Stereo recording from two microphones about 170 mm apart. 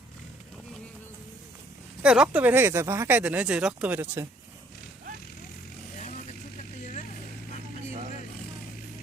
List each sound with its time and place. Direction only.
2.0 s speech: 5° right (ahead or behind)
6.0 s vehicle: 45° left (ahead or behind)